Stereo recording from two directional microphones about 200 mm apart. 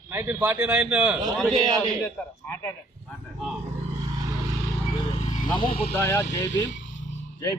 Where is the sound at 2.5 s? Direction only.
10° left (ahead or behind).